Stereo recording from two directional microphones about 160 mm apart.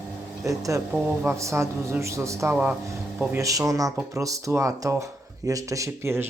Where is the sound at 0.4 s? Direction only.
20° right (ahead or behind).